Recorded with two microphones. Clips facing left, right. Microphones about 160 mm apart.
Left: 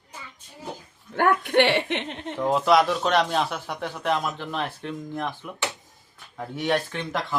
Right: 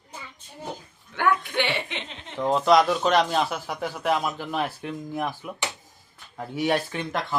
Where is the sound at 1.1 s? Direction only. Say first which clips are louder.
Left 3 dB; 50° left (ahead or behind).